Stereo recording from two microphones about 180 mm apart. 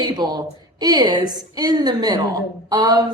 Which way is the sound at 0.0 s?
25° right (ahead or behind).